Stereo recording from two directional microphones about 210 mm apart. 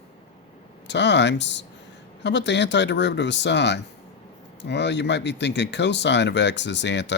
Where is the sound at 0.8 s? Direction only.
55° left (ahead or behind).